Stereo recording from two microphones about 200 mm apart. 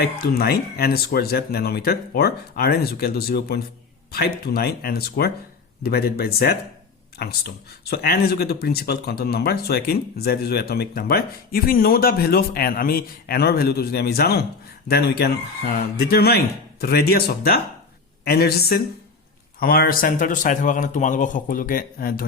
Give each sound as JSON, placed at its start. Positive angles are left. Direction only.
{"t": 0.0, "sound": "a man's voice", "side_deg": 50}